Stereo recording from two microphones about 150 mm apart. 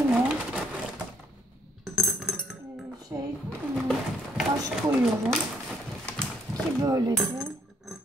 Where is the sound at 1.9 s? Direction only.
Centre (ahead or behind).